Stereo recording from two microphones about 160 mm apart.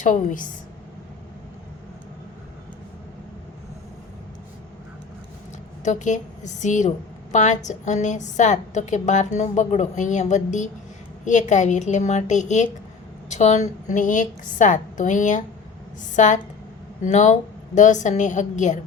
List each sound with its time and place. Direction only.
0.0 s a woman's voice: 55° left (ahead or behind)
5.8 s a woman's voice: 50° left (ahead or behind)